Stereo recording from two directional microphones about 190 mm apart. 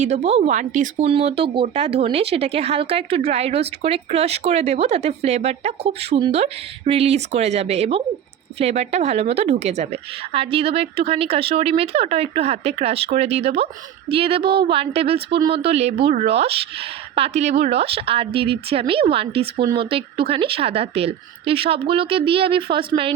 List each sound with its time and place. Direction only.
0.0 s a woman's voice: 35° right (ahead or behind)